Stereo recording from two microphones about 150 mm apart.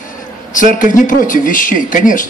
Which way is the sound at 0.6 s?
60° left (ahead or behind).